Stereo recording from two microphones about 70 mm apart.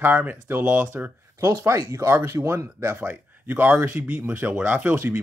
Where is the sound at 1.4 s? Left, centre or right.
Right.